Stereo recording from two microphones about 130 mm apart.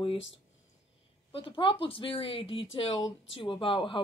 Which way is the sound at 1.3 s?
45° left (ahead or behind).